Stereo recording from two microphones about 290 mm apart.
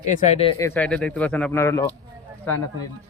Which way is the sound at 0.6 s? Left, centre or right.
Centre.